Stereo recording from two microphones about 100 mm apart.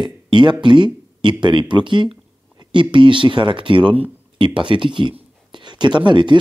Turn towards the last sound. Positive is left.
turn(degrees=-55)  # may be behind; listen again after turning